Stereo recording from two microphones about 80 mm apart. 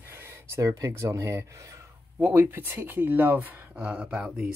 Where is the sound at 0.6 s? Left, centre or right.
Right.